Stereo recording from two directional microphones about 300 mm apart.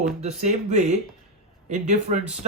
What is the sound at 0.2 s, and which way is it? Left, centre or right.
Speech, right.